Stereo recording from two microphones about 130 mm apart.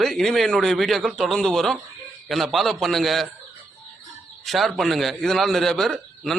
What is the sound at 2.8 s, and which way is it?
Speech, centre (ahead or behind).